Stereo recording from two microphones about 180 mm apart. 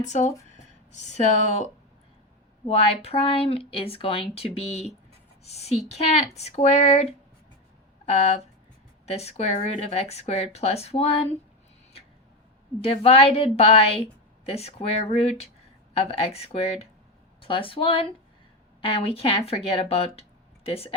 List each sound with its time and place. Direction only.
0.1 s a woman's voice: 40° left (ahead or behind)
12.8 s a woman's voice: 30° left (ahead or behind)